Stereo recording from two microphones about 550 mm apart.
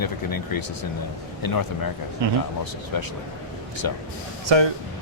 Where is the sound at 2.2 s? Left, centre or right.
Right.